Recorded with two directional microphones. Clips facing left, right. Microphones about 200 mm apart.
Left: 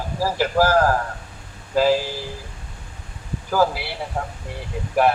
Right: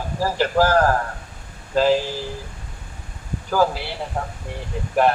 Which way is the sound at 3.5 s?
10° left (ahead or behind).